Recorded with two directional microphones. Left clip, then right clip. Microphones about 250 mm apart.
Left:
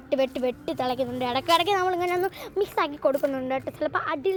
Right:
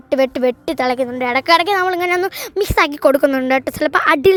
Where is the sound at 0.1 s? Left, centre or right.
Right.